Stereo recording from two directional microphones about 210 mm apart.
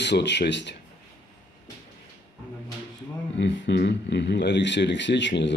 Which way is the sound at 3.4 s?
55° left (ahead or behind).